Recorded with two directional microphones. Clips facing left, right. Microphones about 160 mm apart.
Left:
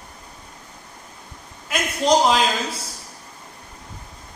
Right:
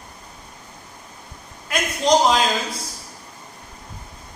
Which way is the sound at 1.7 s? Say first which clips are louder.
Even; 5° left (ahead or behind).